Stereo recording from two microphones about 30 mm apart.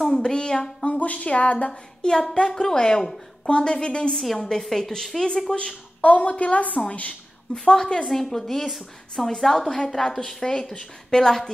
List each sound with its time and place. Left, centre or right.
0.1 s speech: left
0.8 s a woman's voice: left
1.7 s a woman's voice: centre
3.4 s a woman's voice: left
4.1 s a woman's voice: centre
4.4 s speech: centre
5.5 s a woman's voice: left
6.0 s a woman's voice: left
7.6 s speech: centre
10.7 s a woman's voice: left